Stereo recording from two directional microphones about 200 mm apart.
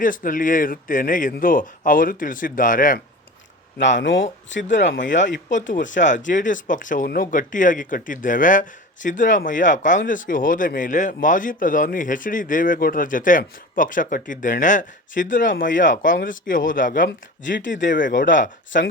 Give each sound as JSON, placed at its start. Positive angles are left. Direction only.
{"t": 0.0, "sound": "a man's voice", "side_deg": 40}
{"t": 3.8, "sound": "speech", "side_deg": 65}
{"t": 5.5, "sound": "a man's voice", "side_deg": 40}
{"t": 17.6, "sound": "speech", "side_deg": 65}
{"t": 17.8, "sound": "speech", "side_deg": 40}